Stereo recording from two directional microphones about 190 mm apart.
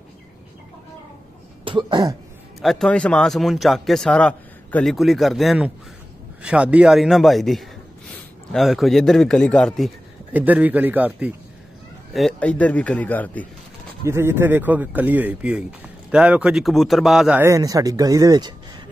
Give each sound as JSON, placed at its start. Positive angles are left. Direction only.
{"t": 1.6, "sound": "throat clearing", "side_deg": -25}
{"t": 2.6, "sound": "speech", "side_deg": 0}
{"t": 10.3, "sound": "a man's voice", "side_deg": -10}
{"t": 14.0, "sound": "speech", "side_deg": -15}